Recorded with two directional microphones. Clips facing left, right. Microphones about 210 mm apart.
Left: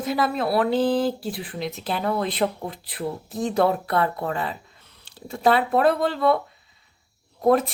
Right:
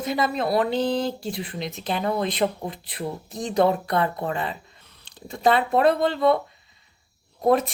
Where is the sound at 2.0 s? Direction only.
15° right (ahead or behind).